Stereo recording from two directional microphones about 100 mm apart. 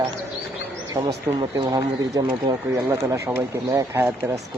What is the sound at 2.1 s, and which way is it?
Speech, 40° right (ahead or behind).